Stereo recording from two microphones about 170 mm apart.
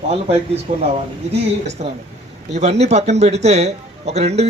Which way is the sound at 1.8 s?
45° right (ahead or behind).